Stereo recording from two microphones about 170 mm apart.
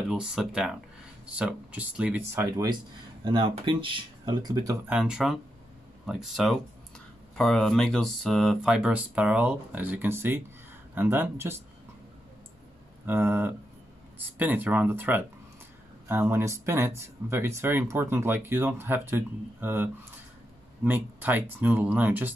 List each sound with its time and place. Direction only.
0.1 s speech: 5° right (ahead or behind)
3.3 s speech: 30° right (ahead or behind)
4.8 s speech: 5° right (ahead or behind)
13.0 s speech: 10° right (ahead or behind)